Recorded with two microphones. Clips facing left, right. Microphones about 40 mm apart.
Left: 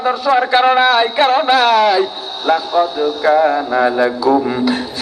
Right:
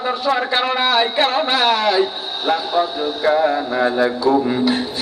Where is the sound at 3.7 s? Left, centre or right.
Centre.